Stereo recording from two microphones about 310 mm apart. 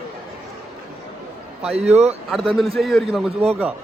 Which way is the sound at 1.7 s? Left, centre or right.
Centre.